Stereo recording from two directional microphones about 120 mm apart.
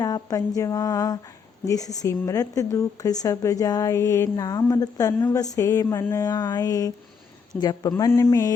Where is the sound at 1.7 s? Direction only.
30° left (ahead or behind).